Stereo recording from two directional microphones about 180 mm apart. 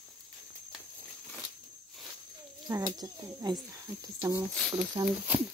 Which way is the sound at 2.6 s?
20° right (ahead or behind).